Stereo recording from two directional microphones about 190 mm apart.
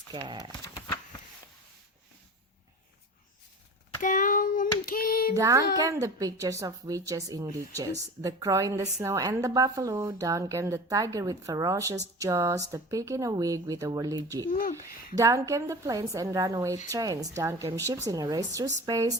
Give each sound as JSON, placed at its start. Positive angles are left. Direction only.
{"t": 0.1, "sound": "speech", "side_deg": -25}
{"t": 4.0, "sound": "child singing", "side_deg": 45}
{"t": 5.3, "sound": "a woman's voice", "side_deg": -15}
{"t": 14.5, "sound": "speech", "side_deg": 50}
{"t": 15.1, "sound": "a woman's voice", "side_deg": -15}